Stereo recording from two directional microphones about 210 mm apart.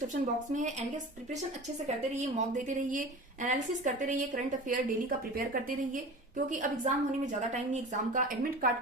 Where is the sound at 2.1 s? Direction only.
35° right (ahead or behind).